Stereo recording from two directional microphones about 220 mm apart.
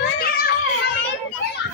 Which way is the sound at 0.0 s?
45° left (ahead or behind).